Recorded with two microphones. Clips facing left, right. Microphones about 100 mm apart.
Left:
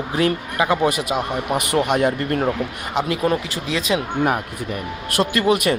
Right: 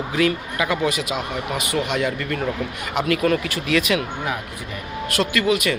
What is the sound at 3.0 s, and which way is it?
Speech, 20° left (ahead or behind).